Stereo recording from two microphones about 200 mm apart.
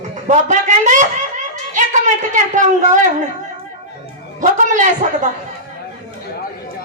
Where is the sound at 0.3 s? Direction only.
35° right (ahead or behind).